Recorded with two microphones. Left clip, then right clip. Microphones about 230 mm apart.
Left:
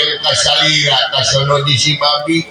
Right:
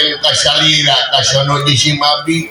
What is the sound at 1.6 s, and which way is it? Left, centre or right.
Speech, right.